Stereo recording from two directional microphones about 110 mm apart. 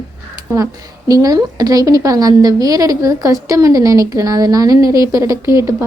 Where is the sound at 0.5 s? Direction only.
30° right (ahead or behind).